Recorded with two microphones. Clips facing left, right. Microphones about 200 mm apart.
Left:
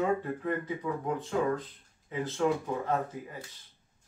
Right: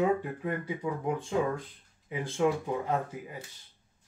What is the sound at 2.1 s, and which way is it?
Speech, 15° right (ahead or behind).